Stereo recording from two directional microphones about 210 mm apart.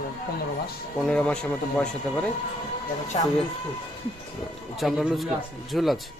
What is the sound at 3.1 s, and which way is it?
Speech, 30° left (ahead or behind).